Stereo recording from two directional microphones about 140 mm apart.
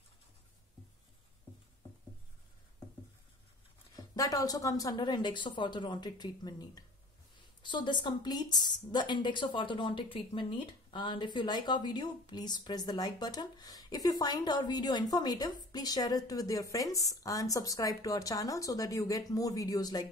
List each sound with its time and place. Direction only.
3.9 s a woman's voice: 25° left (ahead or behind)